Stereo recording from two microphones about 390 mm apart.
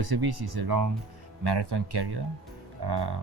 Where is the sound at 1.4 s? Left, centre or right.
Right.